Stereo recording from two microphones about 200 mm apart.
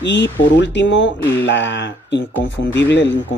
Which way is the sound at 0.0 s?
60° left (ahead or behind).